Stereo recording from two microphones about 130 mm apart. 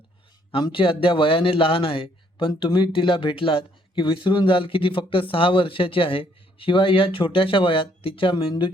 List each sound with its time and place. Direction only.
0.5 s a man's voice: 40° left (ahead or behind)